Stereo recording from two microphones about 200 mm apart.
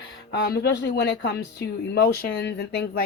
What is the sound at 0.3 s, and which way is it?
Speech, 55° left (ahead or behind).